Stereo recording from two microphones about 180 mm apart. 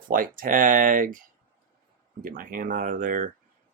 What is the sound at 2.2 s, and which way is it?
Speech, 50° right (ahead or behind).